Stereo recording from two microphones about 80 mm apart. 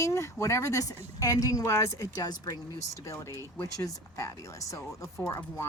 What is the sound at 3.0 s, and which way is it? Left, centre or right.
Speech, left.